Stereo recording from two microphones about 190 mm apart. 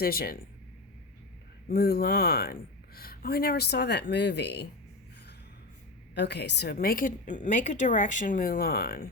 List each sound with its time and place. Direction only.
0.0 s a woman's voice: 55° left (ahead or behind)
1.6 s speech: 55° left (ahead or behind)
6.1 s a woman's voice: 65° left (ahead or behind)